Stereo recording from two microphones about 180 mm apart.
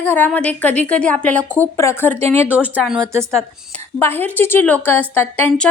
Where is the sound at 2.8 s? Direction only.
5° right (ahead or behind).